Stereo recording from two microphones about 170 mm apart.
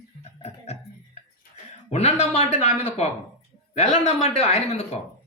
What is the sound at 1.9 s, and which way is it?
Speech, 40° left (ahead or behind).